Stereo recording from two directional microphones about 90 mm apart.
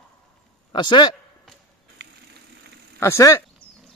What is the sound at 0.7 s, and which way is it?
Speech, 60° left (ahead or behind).